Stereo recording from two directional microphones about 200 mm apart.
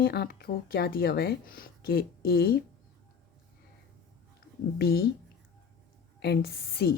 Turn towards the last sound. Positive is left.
turn(degrees=50)  # may be behind; listen again after turning